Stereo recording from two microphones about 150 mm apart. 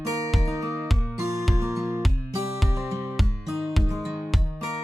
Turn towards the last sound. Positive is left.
turn(degrees=0)  # may be behind; listen again after turning